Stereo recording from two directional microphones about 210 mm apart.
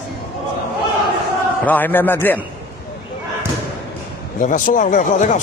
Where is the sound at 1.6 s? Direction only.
10° left (ahead or behind).